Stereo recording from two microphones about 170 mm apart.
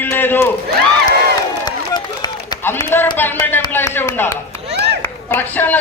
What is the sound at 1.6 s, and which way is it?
Run, 25° left (ahead or behind).